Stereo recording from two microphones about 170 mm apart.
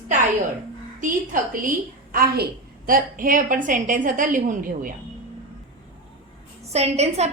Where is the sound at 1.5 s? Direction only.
55° right (ahead or behind).